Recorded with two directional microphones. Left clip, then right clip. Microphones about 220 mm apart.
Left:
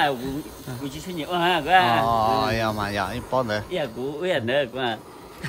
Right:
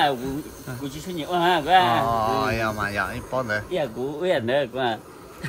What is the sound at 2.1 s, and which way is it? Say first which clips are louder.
Speech: left 2 dB; 15° left (ahead or behind).